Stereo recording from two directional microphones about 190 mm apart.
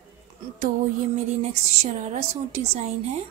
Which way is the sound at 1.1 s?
35° right (ahead or behind).